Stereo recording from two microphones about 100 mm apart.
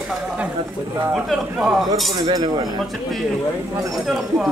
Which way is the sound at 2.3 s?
40° right (ahead or behind).